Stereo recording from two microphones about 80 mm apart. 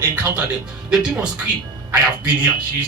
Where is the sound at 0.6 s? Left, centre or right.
Centre.